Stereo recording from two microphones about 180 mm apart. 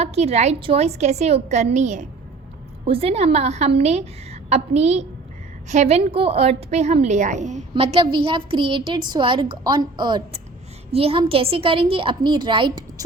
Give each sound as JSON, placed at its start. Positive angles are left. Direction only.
{"t": 0.0, "sound": "a woman's voice", "side_deg": -35}
{"t": 7.7, "sound": "a woman's voice", "side_deg": -30}